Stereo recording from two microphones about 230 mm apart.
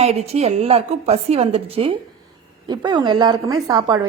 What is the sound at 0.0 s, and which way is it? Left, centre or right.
A woman's voice, right.